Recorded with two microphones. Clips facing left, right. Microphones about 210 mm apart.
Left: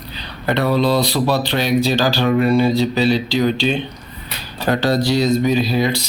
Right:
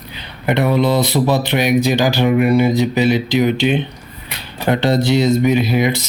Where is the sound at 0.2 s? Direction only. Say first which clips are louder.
Right 2 dB; 20° right (ahead or behind).